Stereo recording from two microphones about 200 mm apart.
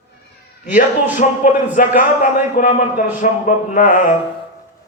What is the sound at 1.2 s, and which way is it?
Speech, 40° left (ahead or behind).